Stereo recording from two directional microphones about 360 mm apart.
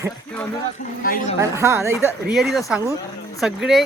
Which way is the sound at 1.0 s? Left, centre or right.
Left.